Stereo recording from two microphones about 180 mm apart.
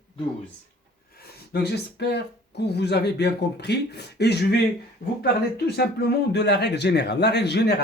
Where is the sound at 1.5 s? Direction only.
65° left (ahead or behind).